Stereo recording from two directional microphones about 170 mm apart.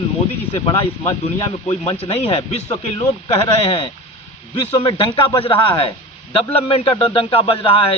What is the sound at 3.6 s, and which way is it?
Speech, 35° left (ahead or behind).